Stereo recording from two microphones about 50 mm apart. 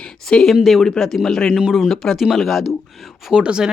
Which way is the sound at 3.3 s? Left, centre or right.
Centre.